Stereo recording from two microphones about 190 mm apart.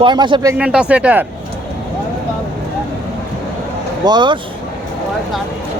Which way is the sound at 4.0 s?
25° right (ahead or behind).